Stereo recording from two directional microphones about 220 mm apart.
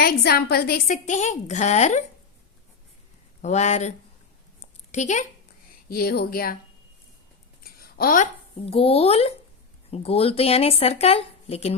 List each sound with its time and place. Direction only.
0.0 s a woman's voice: 45° left (ahead or behind)
3.4 s a woman's voice: 30° left (ahead or behind)
4.6 s a sound: 35° left (ahead or behind)
5.9 s speech: 45° left (ahead or behind)
7.6 s speech: 40° left (ahead or behind)